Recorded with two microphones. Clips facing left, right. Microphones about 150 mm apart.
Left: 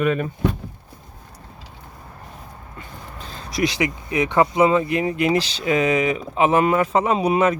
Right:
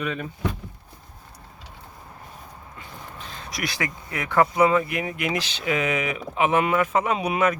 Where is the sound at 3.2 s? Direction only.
30° left (ahead or behind).